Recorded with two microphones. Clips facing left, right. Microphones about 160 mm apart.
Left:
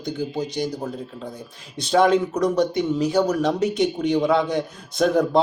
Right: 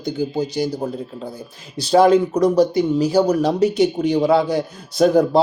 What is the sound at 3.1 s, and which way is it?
Speech, 35° right (ahead or behind).